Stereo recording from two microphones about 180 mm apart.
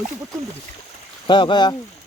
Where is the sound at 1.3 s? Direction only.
25° left (ahead or behind).